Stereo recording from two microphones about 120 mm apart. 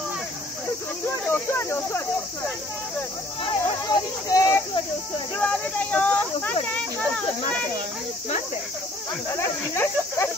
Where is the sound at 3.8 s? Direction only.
30° left (ahead or behind).